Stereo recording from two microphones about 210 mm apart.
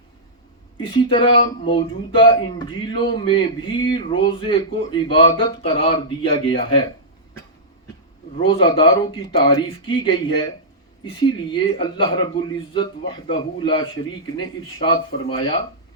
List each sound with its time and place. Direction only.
0.8 s speech: 25° left (ahead or behind)
8.4 s speech: 25° left (ahead or behind)